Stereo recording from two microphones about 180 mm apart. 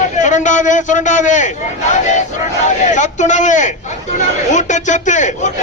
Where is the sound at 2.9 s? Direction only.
40° left (ahead or behind).